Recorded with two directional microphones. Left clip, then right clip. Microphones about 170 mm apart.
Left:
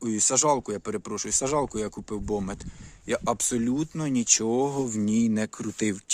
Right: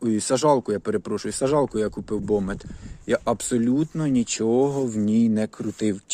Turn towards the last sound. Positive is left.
turn(degrees=15)  # may be behind; listen again after turning